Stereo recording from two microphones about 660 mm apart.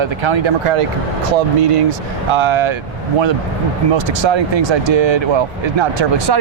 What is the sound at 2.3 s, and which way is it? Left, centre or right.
Speech, right.